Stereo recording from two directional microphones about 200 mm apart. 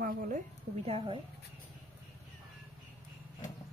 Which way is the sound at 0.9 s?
30° right (ahead or behind).